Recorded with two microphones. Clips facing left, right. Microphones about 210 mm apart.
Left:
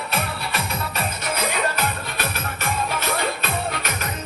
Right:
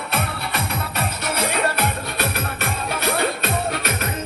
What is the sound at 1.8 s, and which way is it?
Music, 60° right (ahead or behind).